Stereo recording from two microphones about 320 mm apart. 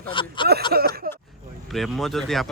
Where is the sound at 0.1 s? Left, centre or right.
Centre.